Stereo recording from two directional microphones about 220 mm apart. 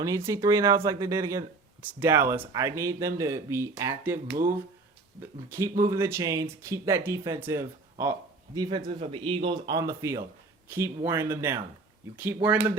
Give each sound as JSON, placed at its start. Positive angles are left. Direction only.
{"t": 0.0, "sound": "speech", "side_deg": -15}
{"t": 5.2, "sound": "speech", "side_deg": -10}